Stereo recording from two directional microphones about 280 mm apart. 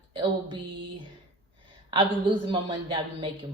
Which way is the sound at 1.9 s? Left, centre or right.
Centre.